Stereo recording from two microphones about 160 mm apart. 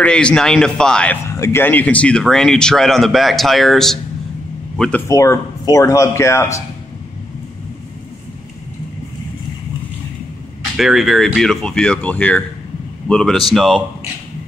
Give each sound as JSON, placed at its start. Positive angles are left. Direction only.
{"t": 0.0, "sound": "speech", "side_deg": 5}
{"t": 1.2, "sound": "speech", "side_deg": 15}
{"t": 5.0, "sound": "speech", "side_deg": 20}
{"t": 10.8, "sound": "speech", "side_deg": 0}